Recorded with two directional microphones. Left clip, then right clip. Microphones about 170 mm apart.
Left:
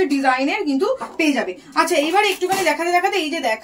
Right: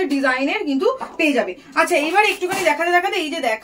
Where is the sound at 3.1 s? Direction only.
15° right (ahead or behind).